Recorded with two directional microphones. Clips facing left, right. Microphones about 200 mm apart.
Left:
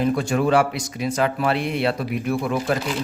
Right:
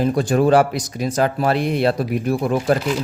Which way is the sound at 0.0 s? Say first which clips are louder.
Right 3 dB; 35° right (ahead or behind).